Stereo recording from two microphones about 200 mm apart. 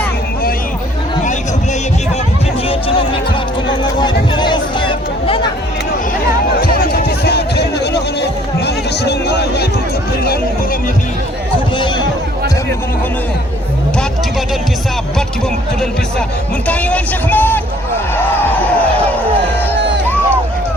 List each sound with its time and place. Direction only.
4.0 s a sound: 20° left (ahead or behind)
6.6 s music: 50° left (ahead or behind)
16.6 s a man's voice: 5° left (ahead or behind)
19.7 s music: 55° right (ahead or behind)